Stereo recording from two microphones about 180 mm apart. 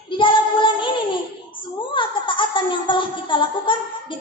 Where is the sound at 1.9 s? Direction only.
25° left (ahead or behind).